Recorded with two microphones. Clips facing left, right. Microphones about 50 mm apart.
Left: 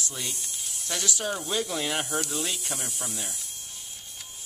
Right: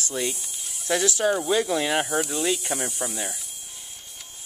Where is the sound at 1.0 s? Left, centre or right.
Right.